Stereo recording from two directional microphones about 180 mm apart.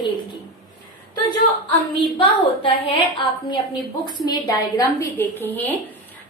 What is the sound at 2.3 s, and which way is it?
Speech, 30° left (ahead or behind).